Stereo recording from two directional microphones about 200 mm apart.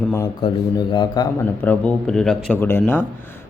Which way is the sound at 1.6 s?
10° left (ahead or behind).